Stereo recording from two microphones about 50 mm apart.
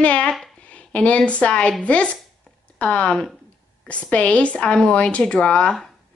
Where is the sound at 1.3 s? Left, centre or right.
Left.